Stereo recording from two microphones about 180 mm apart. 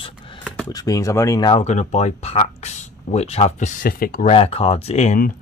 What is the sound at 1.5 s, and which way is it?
Speech, 40° left (ahead or behind).